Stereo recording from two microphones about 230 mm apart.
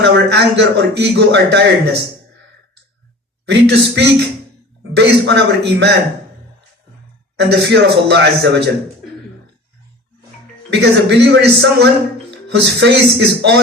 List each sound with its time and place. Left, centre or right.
0.0 s a man's voice: right
3.4 s a man's voice: right
7.3 s a man's voice: right
10.8 s a man's voice: right